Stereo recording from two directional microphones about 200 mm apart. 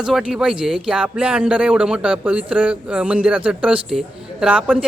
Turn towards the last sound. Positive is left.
turn(degrees=-5)  # may be behind; listen again after turning